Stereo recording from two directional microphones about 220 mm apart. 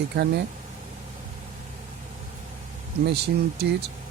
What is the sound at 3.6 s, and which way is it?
Speech, 50° right (ahead or behind).